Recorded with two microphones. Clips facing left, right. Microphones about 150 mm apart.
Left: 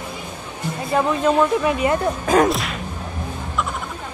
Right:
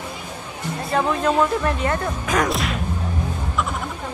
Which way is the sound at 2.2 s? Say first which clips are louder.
Left 6 dB; 30° left (ahead or behind).